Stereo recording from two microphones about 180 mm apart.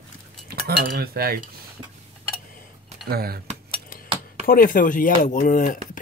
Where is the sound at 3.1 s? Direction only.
60° right (ahead or behind).